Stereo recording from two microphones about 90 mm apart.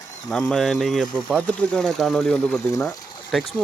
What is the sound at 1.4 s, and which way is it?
Speech, 15° left (ahead or behind).